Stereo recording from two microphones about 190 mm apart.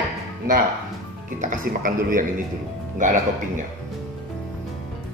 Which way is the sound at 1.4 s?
45° right (ahead or behind).